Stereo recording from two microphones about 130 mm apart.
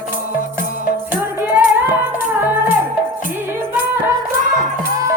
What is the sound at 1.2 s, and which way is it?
Music, 15° right (ahead or behind).